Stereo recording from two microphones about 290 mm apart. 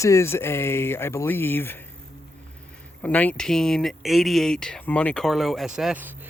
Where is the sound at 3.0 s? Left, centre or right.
Centre.